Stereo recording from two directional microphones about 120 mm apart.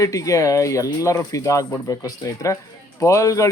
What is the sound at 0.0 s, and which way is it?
Speech, 25° left (ahead or behind).